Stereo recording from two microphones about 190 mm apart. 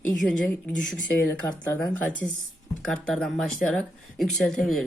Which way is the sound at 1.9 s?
5° left (ahead or behind).